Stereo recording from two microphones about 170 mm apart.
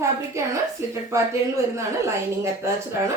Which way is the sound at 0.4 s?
15° right (ahead or behind).